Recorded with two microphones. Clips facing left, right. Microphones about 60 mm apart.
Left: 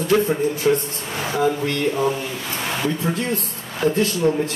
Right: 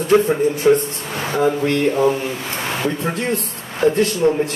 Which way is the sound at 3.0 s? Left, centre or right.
Right.